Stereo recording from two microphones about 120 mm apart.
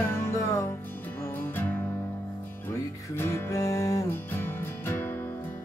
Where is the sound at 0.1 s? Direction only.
25° left (ahead or behind).